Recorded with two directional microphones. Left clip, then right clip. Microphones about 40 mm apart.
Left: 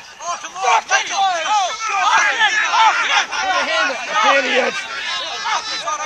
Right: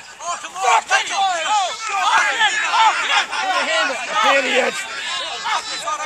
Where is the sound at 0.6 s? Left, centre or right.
Centre.